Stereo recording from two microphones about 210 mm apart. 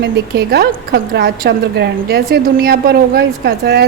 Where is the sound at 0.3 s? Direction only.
50° right (ahead or behind).